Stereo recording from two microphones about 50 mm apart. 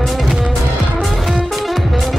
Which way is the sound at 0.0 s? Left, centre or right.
Centre.